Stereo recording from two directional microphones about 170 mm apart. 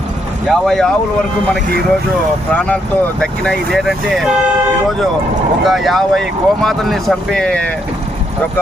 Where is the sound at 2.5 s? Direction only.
5° left (ahead or behind).